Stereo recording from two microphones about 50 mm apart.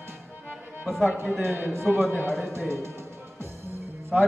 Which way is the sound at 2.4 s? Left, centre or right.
Right.